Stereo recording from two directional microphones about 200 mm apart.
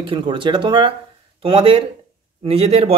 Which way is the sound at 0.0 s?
25° right (ahead or behind).